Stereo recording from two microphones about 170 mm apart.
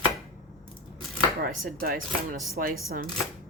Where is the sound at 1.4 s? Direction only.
55° right (ahead or behind).